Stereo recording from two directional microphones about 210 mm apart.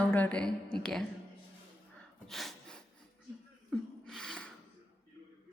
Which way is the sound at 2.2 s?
Centre (ahead or behind).